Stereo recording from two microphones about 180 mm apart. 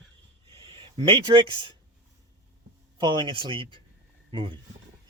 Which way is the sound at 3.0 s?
25° right (ahead or behind).